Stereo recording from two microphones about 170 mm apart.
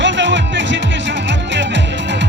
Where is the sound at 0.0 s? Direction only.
90° right.